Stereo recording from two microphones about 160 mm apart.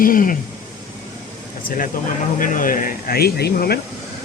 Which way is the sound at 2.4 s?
60° left (ahead or behind).